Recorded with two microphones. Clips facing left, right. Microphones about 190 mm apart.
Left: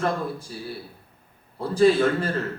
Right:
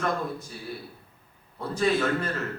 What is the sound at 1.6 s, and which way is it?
Speech, 30° left (ahead or behind).